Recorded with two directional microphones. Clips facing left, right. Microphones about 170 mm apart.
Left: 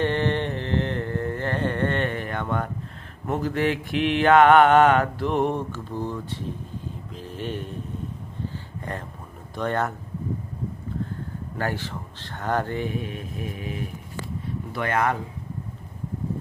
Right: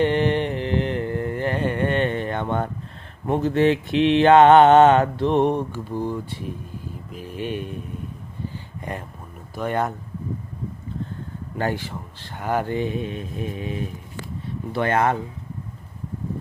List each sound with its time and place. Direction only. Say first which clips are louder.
0.0 s carnatic music: right 4 dB; 15° right (ahead or behind)
3.2 s mantra: right 5 dB; 25° right (ahead or behind)
7.1 s speech: right 3 dB; 10° right (ahead or behind)
8.8 s speech: right 2 dB; 10° right (ahead or behind)
11.5 s mantra: right 3 dB; 20° right (ahead or behind)